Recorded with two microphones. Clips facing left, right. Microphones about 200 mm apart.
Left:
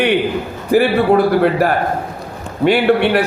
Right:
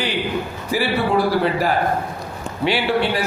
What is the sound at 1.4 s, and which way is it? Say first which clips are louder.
A man's voice: left 5 dB; 55° left (ahead or behind).